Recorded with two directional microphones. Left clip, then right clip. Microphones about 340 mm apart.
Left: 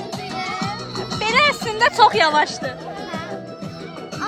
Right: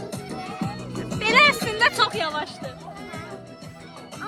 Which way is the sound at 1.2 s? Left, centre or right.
Centre.